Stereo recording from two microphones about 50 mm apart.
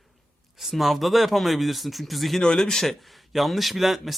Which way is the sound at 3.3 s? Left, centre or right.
Centre.